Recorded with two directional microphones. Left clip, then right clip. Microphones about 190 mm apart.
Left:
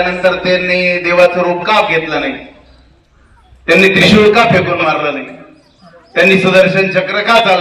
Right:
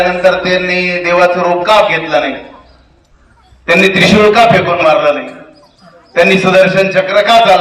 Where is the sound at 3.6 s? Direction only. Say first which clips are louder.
Even; centre (ahead or behind).